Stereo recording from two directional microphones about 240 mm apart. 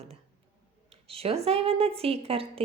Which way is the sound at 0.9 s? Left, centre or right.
Right.